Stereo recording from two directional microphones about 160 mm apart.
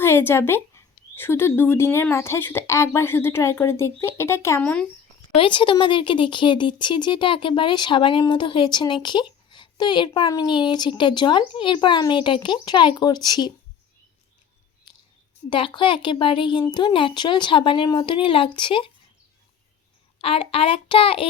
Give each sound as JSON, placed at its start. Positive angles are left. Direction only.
{"t": 0.0, "sound": "speech", "side_deg": 15}
{"t": 5.4, "sound": "speech", "side_deg": 30}
{"t": 15.4, "sound": "speech", "side_deg": 30}
{"t": 20.1, "sound": "speech", "side_deg": 35}